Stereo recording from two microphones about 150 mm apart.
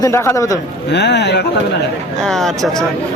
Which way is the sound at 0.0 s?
20° left (ahead or behind).